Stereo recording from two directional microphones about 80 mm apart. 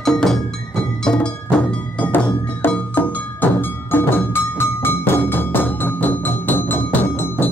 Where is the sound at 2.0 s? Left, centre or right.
Left.